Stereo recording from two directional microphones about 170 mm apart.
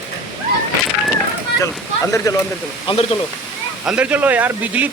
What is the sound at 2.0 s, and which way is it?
Speech, 20° left (ahead or behind).